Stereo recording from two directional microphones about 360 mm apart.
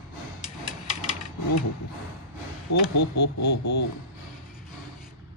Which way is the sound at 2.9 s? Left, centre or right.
Left.